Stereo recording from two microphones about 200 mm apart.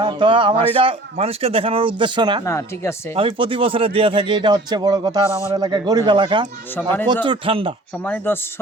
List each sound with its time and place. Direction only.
0.0 s speech: 25° right (ahead or behind)
2.4 s speech: 15° left (ahead or behind)
3.2 s speech: 25° right (ahead or behind)
6.8 s speech: 5° left (ahead or behind)
7.3 s speech: 25° right (ahead or behind)
8.0 s speech: 10° left (ahead or behind)